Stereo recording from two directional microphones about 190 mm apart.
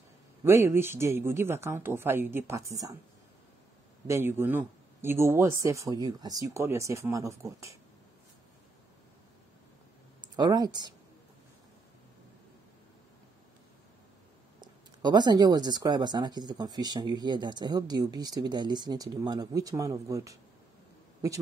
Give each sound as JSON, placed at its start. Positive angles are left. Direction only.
{"t": 0.4, "sound": "speech", "side_deg": -15}
{"t": 4.1, "sound": "speech", "side_deg": -10}
{"t": 10.3, "sound": "speech", "side_deg": -20}
{"t": 14.6, "sound": "speech", "side_deg": -20}